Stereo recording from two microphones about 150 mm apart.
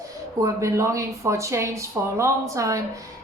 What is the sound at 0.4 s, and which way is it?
Speech, 20° right (ahead or behind).